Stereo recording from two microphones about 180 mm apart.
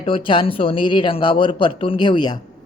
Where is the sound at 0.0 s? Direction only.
30° left (ahead or behind).